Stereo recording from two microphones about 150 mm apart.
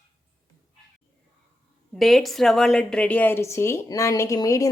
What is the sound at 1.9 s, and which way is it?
A woman's voice, centre (ahead or behind).